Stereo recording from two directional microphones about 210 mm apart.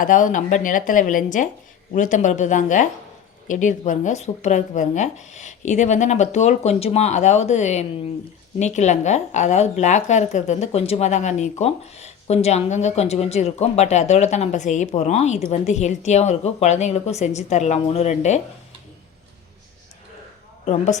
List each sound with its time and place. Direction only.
0.0 s a woman's voice: 40° left (ahead or behind)
20.7 s a woman's voice: 35° left (ahead or behind)